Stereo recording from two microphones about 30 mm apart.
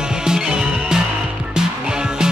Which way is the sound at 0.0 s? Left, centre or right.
Right.